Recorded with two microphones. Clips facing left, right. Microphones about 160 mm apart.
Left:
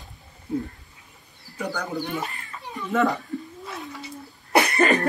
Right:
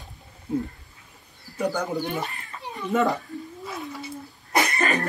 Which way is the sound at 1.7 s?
20° right (ahead or behind).